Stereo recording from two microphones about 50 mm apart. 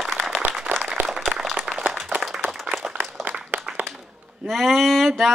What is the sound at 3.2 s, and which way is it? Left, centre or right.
Applause, right.